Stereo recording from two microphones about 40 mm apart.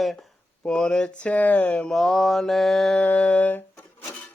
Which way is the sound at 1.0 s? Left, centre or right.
Left.